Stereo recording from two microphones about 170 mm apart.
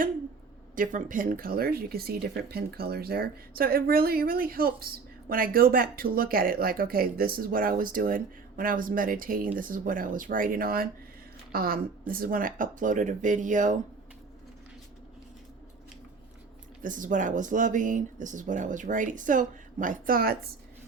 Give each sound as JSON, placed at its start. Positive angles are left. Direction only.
{"t": 0.8, "sound": "speech", "side_deg": -50}
{"t": 16.8, "sound": "speech", "side_deg": -50}